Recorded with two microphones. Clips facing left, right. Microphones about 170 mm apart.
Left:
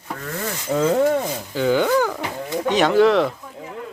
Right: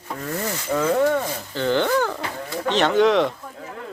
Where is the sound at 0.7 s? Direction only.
30° left (ahead or behind).